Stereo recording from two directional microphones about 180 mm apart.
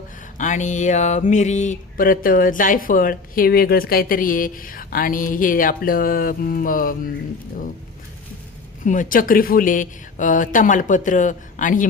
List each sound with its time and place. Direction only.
0.3 s mantra: 45° left (ahead or behind)
8.8 s mantra: 45° left (ahead or behind)